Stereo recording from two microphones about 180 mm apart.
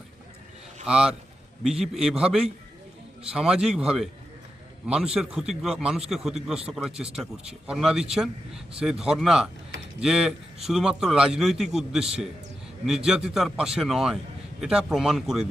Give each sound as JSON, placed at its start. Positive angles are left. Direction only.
{"t": 0.9, "sound": "a man's voice", "side_deg": -5}